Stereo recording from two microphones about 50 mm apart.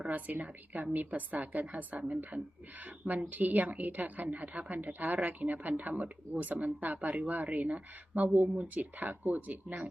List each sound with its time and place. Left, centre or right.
0.1 s a woman's voice: right